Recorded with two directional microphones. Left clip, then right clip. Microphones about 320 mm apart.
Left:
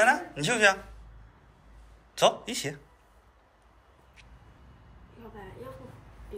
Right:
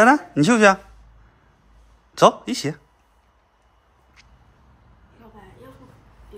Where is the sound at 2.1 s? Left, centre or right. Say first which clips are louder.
Right 9 dB; centre.